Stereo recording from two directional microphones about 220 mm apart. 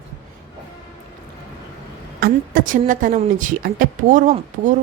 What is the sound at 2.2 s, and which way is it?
A woman's voice, 40° right (ahead or behind).